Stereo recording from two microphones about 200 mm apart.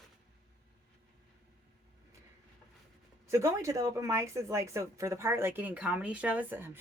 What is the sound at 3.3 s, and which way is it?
Speech, 15° right (ahead or behind).